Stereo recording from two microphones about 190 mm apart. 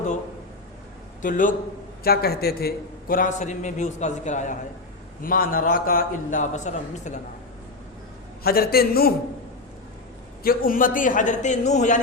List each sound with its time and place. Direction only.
1.2 s a man's voice: 45° left (ahead or behind)
2.0 s a man's voice: 55° left (ahead or behind); by 7.2 s 40° left (ahead or behind)
8.4 s a man's voice: 55° left (ahead or behind)
10.4 s a man's voice: 50° left (ahead or behind)